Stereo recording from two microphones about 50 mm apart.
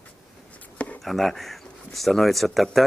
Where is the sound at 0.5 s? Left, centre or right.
Left.